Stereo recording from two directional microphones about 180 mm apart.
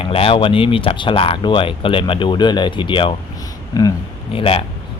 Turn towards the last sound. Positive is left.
turn(degrees=30)  # may be behind; listen again after turning